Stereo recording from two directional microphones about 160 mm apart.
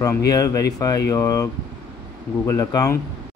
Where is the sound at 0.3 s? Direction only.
20° left (ahead or behind).